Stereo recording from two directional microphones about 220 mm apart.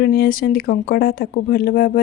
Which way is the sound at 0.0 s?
45° left (ahead or behind).